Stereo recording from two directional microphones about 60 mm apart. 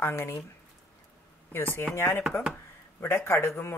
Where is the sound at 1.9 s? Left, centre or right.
Left.